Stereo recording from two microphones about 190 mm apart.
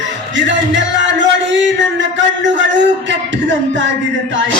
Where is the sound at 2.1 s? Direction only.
75° right (ahead or behind).